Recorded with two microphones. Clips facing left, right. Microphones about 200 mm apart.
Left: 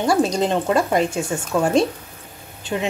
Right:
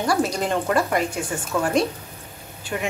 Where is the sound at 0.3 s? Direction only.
20° left (ahead or behind).